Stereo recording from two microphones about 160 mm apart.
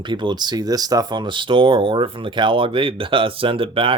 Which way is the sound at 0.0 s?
30° right (ahead or behind).